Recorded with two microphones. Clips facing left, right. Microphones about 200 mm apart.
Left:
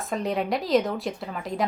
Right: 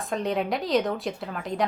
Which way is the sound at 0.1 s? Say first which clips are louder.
Even; centre (ahead or behind).